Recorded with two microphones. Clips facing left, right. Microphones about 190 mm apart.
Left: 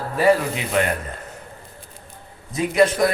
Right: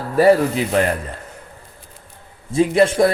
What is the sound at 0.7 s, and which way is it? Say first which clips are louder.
Speech: right 3 dB; 35° right (ahead or behind).